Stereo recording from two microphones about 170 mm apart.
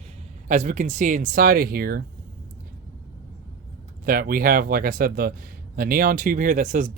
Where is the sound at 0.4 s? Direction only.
45° right (ahead or behind); by 2.0 s 65° right (ahead or behind).